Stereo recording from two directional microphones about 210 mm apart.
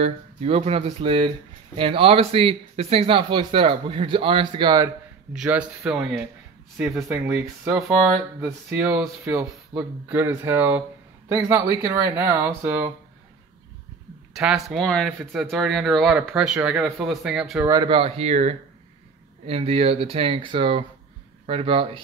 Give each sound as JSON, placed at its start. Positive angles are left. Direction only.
{"t": 0.0, "sound": "speech", "side_deg": -30}
{"t": 5.3, "sound": "speech", "side_deg": -5}
{"t": 14.3, "sound": "speech", "side_deg": 0}
{"t": 17.6, "sound": "speech", "side_deg": -20}